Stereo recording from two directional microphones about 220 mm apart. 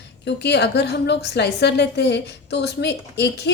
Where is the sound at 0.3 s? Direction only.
50° left (ahead or behind).